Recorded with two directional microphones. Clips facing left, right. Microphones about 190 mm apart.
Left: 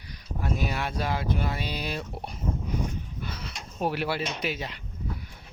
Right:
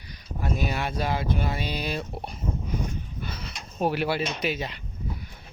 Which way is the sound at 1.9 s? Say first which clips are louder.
Right 2 dB; 15° right (ahead or behind).